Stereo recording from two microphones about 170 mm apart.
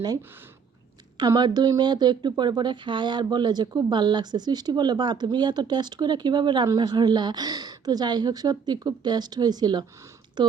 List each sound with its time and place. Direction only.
1.2 s speech: 25° right (ahead or behind)